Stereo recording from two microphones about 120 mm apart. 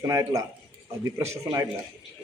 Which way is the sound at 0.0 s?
25° right (ahead or behind).